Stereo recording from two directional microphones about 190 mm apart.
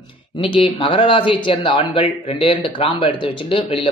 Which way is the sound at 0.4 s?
25° left (ahead or behind).